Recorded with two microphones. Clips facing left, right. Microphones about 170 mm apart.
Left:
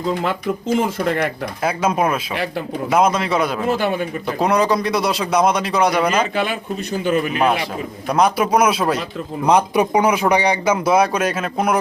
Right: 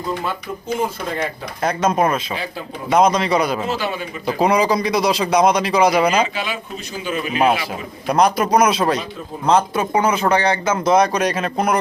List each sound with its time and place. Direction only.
0.8 s speech: 70° left (ahead or behind)
1.6 s a man's voice: 5° left (ahead or behind)
2.3 s speech: 70° left (ahead or behind)
2.9 s a man's voice: 5° left (ahead or behind)
3.7 s speech: 55° left (ahead or behind)
4.3 s a man's voice: centre (ahead or behind)
6.3 s speech: 55° left (ahead or behind)
8.0 s a man's voice: centre (ahead or behind)